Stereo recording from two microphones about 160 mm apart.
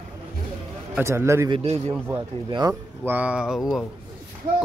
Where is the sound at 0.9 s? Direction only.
15° right (ahead or behind).